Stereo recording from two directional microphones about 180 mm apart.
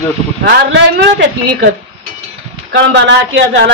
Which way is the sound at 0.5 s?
85° right.